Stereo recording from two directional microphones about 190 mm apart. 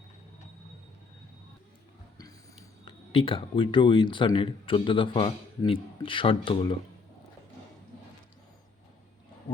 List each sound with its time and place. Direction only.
2.8 s speech: 25° left (ahead or behind)